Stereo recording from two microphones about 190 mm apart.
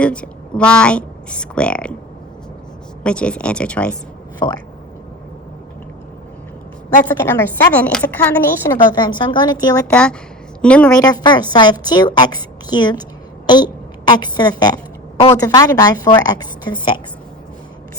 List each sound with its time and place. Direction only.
0.0 s a woman's voice: 5° left (ahead or behind)
3.0 s speech: 5° left (ahead or behind)
4.4 s speech: 20° left (ahead or behind)
7.0 s speech: 10° left (ahead or behind)
9.9 s speech: 5° left (ahead or behind)
10.9 s a woman's voice: 20° left (ahead or behind)
14.1 s a woman's voice: 20° left (ahead or behind)